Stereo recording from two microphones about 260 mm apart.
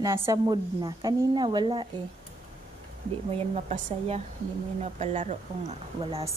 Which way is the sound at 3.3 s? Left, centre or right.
Right.